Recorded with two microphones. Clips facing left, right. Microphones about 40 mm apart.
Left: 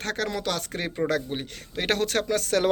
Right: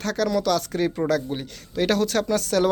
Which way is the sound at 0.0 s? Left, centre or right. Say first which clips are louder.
Right 5 dB; left.